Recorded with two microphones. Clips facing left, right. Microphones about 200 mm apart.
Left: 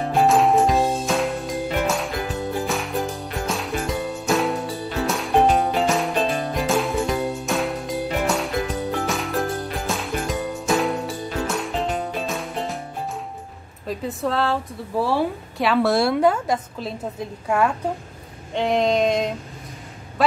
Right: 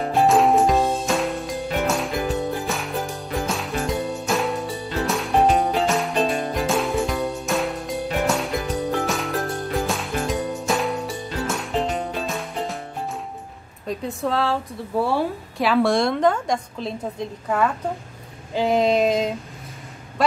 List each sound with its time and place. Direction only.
0.1 s music: centre (ahead or behind)
13.8 s a woman's voice: centre (ahead or behind)
18.5 s a woman's voice: 5° right (ahead or behind)